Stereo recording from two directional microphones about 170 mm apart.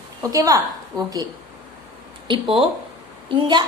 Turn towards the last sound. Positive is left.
turn(degrees=-25)  # may be behind; listen again after turning